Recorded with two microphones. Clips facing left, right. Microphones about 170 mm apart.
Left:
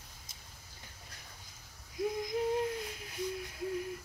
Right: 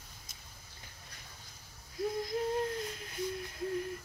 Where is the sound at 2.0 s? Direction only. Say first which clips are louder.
Left 1 dB; 15° left (ahead or behind).